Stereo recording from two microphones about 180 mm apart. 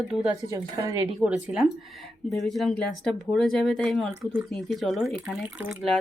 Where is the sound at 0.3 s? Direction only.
20° right (ahead or behind).